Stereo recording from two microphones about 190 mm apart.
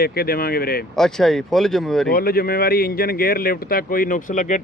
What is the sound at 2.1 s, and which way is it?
Speech, 50° left (ahead or behind).